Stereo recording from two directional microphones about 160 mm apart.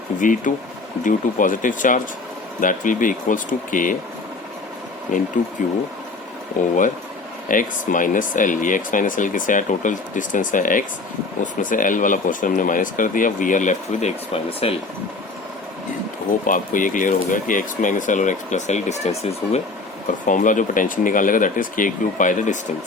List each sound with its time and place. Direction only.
0.2 s speech: 55° left (ahead or behind)
5.1 s speech: 55° left (ahead or behind)
6.6 s speech: 55° left (ahead or behind); by 14.8 s 40° left (ahead or behind)
16.5 s speech: 55° left (ahead or behind)
20.2 s speech: 55° left (ahead or behind)